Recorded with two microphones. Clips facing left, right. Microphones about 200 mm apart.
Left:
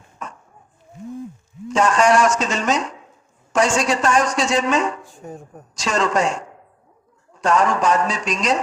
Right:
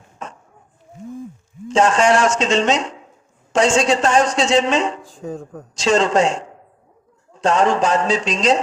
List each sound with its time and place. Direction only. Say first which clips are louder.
1.7 s a man's voice: right 1 dB; 25° right (ahead or behind)
5.0 s speech: right 6 dB; 90° right
5.8 s a man's voice: right 4 dB; 30° right (ahead or behind)